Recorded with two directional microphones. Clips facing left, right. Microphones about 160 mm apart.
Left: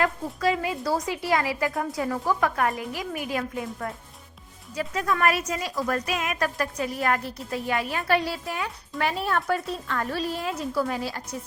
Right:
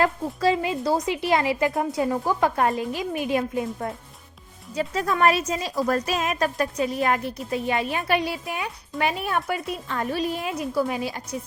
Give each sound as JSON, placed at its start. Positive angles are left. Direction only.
{"t": 0.0, "sound": "a woman's voice", "side_deg": -30}